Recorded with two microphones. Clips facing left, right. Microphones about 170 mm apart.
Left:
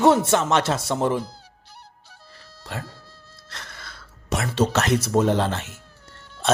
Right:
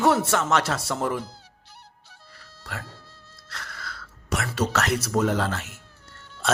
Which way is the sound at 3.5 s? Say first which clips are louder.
Right 2 dB; 20° left (ahead or behind).